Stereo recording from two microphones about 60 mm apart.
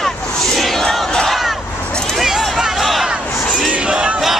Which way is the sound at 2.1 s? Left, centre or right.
Centre.